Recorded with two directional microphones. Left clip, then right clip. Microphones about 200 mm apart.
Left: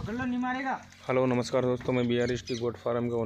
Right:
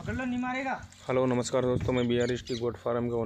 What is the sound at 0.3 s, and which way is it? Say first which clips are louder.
Speech: left 1 dB; 25° right (ahead or behind).